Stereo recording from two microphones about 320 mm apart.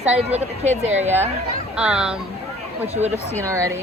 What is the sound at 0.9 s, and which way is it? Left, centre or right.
Speech, centre.